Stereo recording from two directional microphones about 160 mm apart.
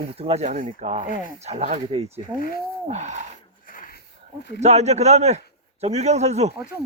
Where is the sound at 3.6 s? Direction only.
60° left (ahead or behind).